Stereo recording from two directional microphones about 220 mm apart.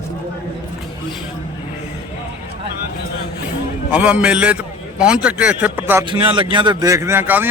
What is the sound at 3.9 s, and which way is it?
A man's voice, 5° right (ahead or behind).